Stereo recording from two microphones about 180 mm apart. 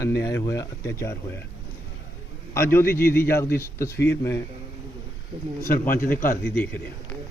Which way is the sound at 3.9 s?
70° left (ahead or behind).